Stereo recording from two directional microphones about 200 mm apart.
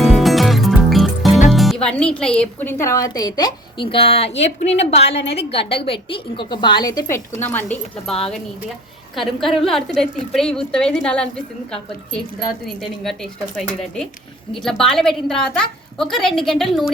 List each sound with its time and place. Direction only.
0.0 s music: centre (ahead or behind)
1.5 s speech: centre (ahead or behind); by 7.2 s 20° left (ahead or behind)
7.4 s speech: 10° left (ahead or behind)
9.1 s a woman's voice: centre (ahead or behind)